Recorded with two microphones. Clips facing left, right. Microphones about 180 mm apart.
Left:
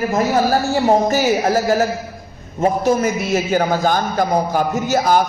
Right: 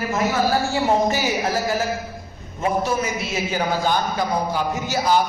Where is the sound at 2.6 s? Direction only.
45° left (ahead or behind).